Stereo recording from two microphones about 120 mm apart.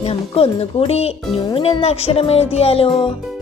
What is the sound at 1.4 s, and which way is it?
Speech, 45° left (ahead or behind).